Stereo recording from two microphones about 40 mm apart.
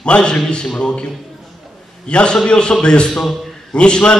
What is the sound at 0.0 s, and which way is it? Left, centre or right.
A man's voice, left.